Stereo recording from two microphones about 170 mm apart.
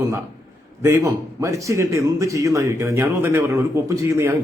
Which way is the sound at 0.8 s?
15° right (ahead or behind).